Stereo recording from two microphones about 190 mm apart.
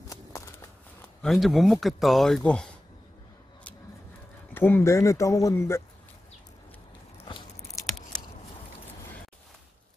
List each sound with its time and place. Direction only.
1.2 s speech: 5° left (ahead or behind)
4.6 s speech: 10° left (ahead or behind)
7.2 s biting: 25° left (ahead or behind)